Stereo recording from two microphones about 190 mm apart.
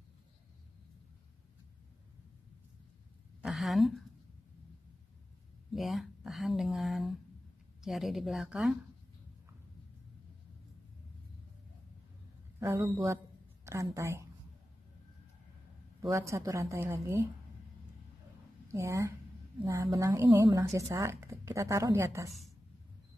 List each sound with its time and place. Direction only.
3.4 s a woman's voice: centre (ahead or behind)
5.7 s a sound: centre (ahead or behind)
7.8 s speech: centre (ahead or behind)
12.5 s speech: 20° right (ahead or behind)
16.1 s speech: 15° right (ahead or behind)
18.7 s speech: 15° right (ahead or behind)